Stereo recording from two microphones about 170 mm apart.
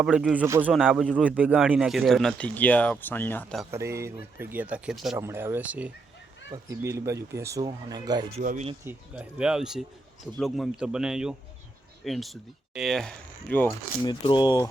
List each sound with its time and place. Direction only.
0.0 s a man's voice: 5° right (ahead or behind)
0.7 s a man's voice: centre (ahead or behind)
3.7 s speech: 15° right (ahead or behind)
8.4 s speech: 45° right (ahead or behind)
8.8 s a man's voice: 10° right (ahead or behind); by 13.7 s 10° left (ahead or behind)
14.0 s speech: 25° left (ahead or behind)